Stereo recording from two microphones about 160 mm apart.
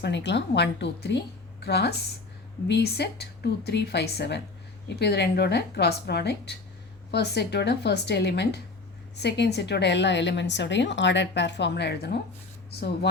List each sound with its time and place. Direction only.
0.0 s a woman's voice: 90° left